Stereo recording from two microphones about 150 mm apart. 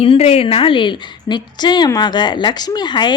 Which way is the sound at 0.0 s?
40° left (ahead or behind).